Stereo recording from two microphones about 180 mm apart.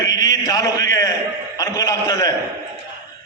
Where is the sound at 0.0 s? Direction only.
20° left (ahead or behind).